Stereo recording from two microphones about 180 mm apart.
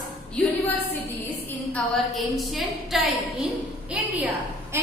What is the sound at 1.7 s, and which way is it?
A woman's voice, centre (ahead or behind).